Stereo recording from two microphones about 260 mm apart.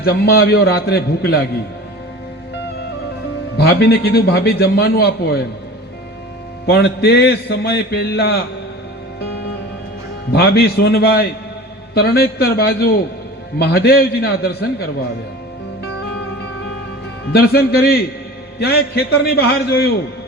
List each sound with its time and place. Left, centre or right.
0.0 s a man's voice: left
3.6 s a man's voice: left
6.7 s a man's voice: left
10.3 s a man's voice: left
17.3 s a man's voice: left